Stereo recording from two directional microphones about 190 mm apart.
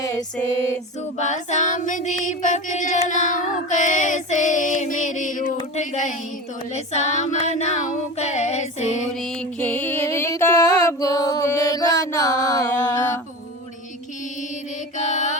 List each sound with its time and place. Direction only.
0.0 s female singing: 20° left (ahead or behind)
1.2 s female singing: 40° left (ahead or behind)
9.2 s music: 5° left (ahead or behind)
14.9 s music: 40° left (ahead or behind)